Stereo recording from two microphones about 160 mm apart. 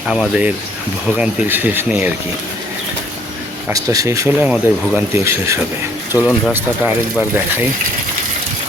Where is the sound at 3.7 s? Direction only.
20° right (ahead or behind).